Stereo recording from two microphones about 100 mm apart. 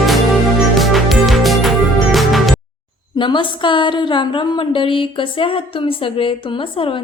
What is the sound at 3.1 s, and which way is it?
A woman's voice, 55° left (ahead or behind).